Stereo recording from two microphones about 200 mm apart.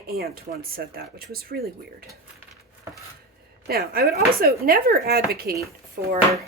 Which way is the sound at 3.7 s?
50° right (ahead or behind).